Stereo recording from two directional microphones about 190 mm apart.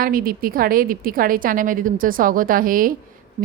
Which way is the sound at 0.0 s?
50° right (ahead or behind).